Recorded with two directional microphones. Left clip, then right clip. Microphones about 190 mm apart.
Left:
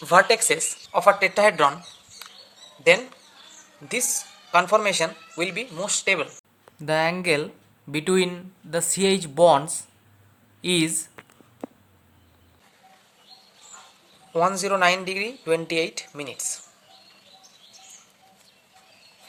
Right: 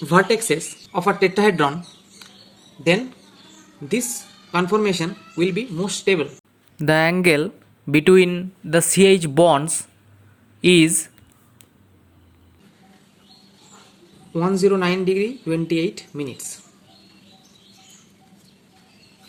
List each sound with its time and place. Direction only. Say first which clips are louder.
0.0 s speech: even; 25° left (ahead or behind)
2.2 s a sound: left 1 dB; 30° left (ahead or behind)
3.8 s speech: right 2 dB; 30° left (ahead or behind)
6.7 s speech: right 5 dB; 40° right (ahead or behind)
14.3 s speech: right 3 dB; 35° left (ahead or behind)